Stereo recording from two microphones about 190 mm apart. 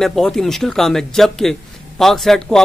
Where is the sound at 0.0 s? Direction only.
Centre (ahead or behind).